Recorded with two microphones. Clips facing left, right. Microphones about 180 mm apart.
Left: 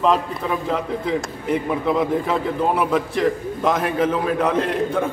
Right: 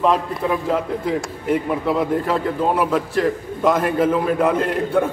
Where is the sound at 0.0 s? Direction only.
5° right (ahead or behind).